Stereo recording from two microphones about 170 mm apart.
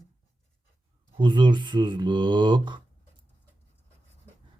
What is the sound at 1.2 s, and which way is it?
Speech, 30° right (ahead or behind).